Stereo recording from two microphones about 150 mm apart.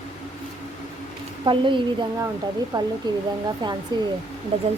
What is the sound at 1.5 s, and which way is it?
A woman's voice, 35° right (ahead or behind).